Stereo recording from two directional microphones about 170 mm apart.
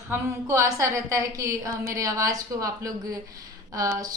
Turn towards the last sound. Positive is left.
turn(degrees=-20)  # may be behind; listen again after turning